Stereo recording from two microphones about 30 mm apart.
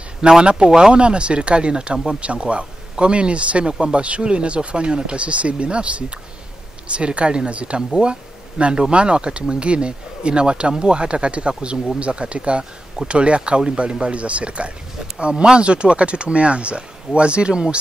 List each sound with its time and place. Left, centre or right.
0.4 s speech: right